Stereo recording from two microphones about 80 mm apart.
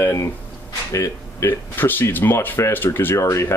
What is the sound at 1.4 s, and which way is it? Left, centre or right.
Speech, left.